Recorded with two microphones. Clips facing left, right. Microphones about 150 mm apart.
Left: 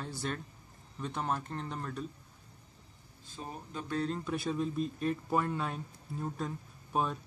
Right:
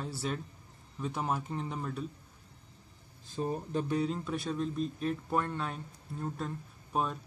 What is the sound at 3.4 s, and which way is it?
Speech, 40° right (ahead or behind).